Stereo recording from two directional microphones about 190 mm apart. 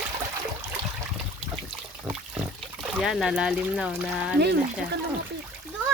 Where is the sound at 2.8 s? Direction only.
Centre (ahead or behind).